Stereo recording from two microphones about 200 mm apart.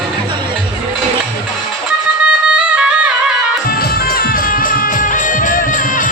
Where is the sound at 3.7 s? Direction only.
50° left (ahead or behind).